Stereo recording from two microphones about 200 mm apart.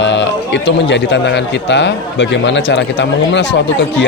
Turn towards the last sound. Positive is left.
turn(degrees=60)  # may be behind; listen again after turning